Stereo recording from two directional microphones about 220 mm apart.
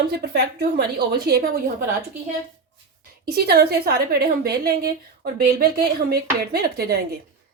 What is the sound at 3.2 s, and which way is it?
A woman's voice, 45° right (ahead or behind).